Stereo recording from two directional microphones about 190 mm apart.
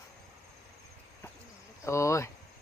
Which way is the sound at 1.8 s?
15° left (ahead or behind).